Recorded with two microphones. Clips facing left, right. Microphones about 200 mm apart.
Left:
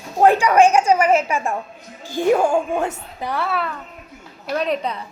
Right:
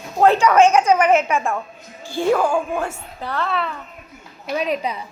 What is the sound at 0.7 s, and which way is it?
Speech, 30° left (ahead or behind).